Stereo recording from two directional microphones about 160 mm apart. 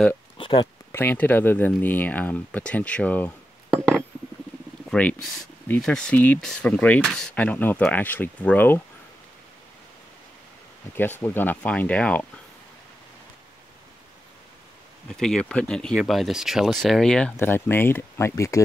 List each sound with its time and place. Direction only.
0.4 s speech: 30° left (ahead or behind)
0.9 s speech: 15° left (ahead or behind)
3.7 s a sound: centre (ahead or behind)
4.9 s speech: 10° left (ahead or behind)
11.0 s speech: 15° left (ahead or behind)
15.0 s speech: 5° left (ahead or behind); by 18.6 s 20° left (ahead or behind)